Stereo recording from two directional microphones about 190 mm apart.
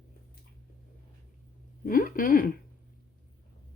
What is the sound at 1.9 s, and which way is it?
Speech, 45° left (ahead or behind).